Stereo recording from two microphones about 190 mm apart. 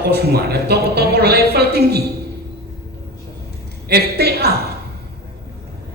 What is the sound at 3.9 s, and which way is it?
Speech, 55° right (ahead or behind).